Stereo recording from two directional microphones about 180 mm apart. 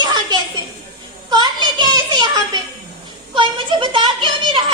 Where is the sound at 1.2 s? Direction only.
25° right (ahead or behind).